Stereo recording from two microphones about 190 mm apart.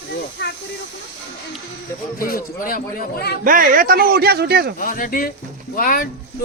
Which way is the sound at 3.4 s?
45° right (ahead or behind).